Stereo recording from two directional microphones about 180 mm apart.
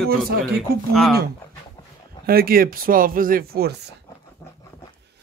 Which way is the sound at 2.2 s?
55° right (ahead or behind).